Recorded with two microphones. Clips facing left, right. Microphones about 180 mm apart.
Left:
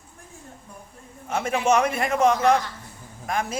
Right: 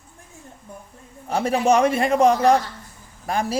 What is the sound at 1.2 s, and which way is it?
Speech, 35° right (ahead or behind).